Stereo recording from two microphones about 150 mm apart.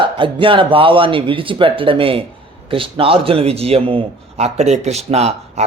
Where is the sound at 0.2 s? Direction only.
35° right (ahead or behind).